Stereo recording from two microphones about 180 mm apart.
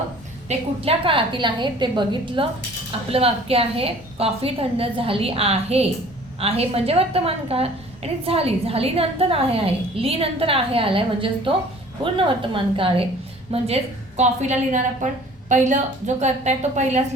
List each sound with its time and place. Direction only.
0.4 s a woman's voice: 35° right (ahead or behind)
12.7 s a woman's voice: 30° right (ahead or behind)